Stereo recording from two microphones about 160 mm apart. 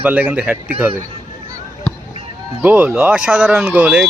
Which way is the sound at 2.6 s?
10° right (ahead or behind).